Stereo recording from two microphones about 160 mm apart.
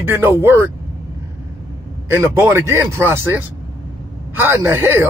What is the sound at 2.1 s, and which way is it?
Speech, 15° right (ahead or behind).